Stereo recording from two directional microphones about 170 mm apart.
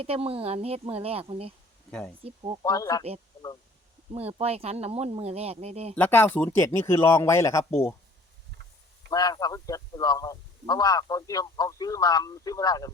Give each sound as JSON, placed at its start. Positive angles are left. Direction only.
{"t": 0.0, "sound": "speech", "side_deg": -35}
{"t": 1.9, "sound": "speech", "side_deg": 5}
{"t": 2.2, "sound": "speech", "side_deg": -35}
{"t": 2.6, "sound": "a man's voice", "side_deg": 20}
{"t": 4.1, "sound": "speech", "side_deg": -35}
{"t": 5.9, "sound": "speech", "side_deg": 10}
{"t": 9.0, "sound": "a man's voice", "side_deg": 20}